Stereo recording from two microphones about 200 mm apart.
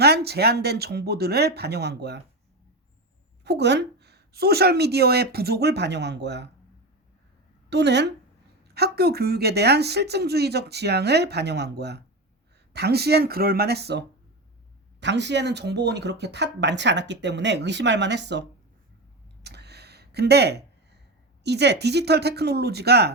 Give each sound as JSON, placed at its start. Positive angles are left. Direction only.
{"t": 0.0, "sound": "speech", "side_deg": -55}
{"t": 3.4, "sound": "speech", "side_deg": -55}
{"t": 7.7, "sound": "speech", "side_deg": -55}
{"t": 15.0, "sound": "speech", "side_deg": -60}
{"t": 19.4, "sound": "a sound", "side_deg": -55}
{"t": 21.4, "sound": "speech", "side_deg": -55}